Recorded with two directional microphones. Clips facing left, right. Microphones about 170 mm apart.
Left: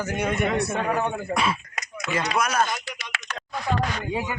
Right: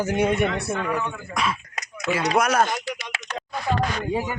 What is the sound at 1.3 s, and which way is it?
Speech, centre (ahead or behind).